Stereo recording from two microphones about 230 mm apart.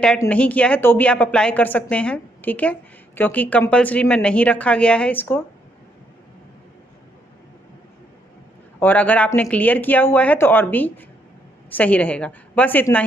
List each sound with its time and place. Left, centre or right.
0.0 s speech: centre
8.7 s speech: centre